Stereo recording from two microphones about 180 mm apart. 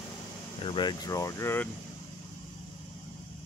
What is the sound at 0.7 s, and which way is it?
Speech, 25° left (ahead or behind).